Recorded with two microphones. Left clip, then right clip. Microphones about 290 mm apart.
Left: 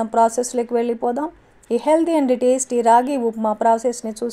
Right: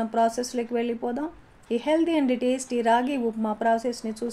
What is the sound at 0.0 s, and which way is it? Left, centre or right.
A woman's voice, left.